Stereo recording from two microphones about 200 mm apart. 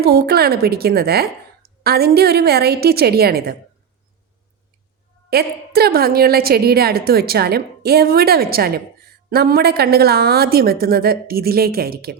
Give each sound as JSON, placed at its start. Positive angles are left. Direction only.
{"t": 0.0, "sound": "a woman's voice", "side_deg": -50}
{"t": 5.3, "sound": "a woman's voice", "side_deg": -50}